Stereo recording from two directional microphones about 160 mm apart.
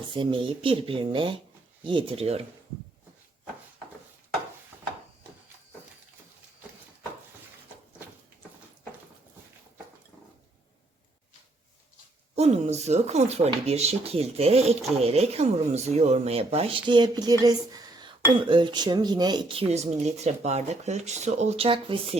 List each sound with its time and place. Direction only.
0.1 s speech: 30° right (ahead or behind)
12.4 s speech: 45° right (ahead or behind)